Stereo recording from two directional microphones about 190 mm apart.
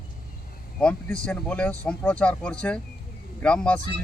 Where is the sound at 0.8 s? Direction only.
5° left (ahead or behind).